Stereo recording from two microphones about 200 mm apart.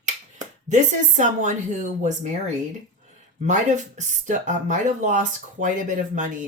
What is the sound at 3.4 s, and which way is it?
Speech, 35° right (ahead or behind).